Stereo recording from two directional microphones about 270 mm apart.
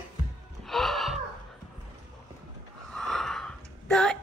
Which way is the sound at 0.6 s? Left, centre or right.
Centre.